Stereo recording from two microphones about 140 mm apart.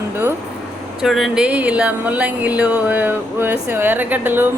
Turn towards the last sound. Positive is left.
turn(degrees=-15)  # may be behind; listen again after turning